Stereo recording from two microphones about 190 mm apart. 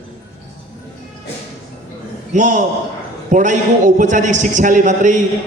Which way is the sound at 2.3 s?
40° right (ahead or behind).